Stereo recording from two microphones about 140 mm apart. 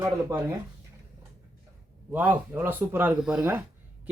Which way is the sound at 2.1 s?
10° right (ahead or behind).